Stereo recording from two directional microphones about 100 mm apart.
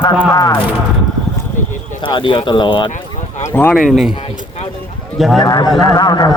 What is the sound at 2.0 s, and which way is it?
Speech, 55° left (ahead or behind).